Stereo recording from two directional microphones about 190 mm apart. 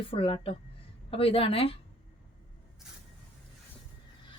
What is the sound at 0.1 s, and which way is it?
Speech, 30° left (ahead or behind).